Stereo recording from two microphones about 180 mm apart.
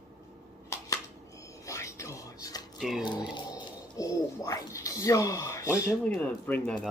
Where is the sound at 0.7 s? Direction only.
15° left (ahead or behind).